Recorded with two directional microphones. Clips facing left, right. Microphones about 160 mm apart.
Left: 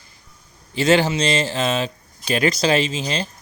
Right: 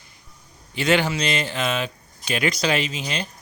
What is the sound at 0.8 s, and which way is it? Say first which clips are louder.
Speech: left 4 dB; 30° left (ahead or behind).